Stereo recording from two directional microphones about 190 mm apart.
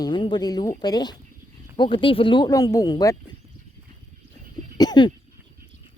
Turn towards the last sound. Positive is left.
turn(degrees=20)  # may be behind; listen again after turning